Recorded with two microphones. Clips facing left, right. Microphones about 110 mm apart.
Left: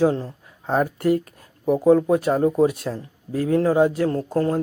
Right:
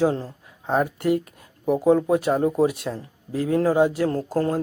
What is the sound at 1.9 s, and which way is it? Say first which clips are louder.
Speech: left 2 dB; 25° right (ahead or behind).